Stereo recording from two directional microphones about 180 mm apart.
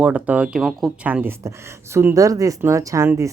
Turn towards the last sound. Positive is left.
turn(degrees=-15)  # may be behind; listen again after turning